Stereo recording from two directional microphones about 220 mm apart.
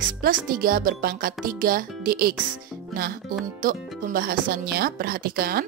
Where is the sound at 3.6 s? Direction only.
40° right (ahead or behind).